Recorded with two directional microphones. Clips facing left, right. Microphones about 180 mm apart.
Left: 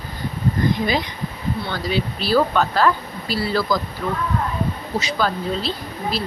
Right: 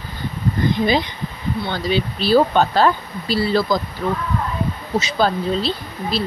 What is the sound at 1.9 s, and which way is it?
Speech, 25° right (ahead or behind).